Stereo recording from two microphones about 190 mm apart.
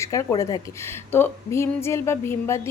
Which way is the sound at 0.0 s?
15° left (ahead or behind).